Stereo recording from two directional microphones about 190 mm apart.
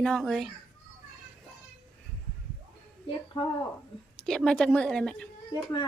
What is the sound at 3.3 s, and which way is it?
Speech, 20° left (ahead or behind).